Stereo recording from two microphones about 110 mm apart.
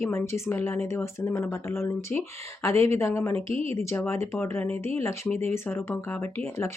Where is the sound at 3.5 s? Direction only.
65° right (ahead or behind).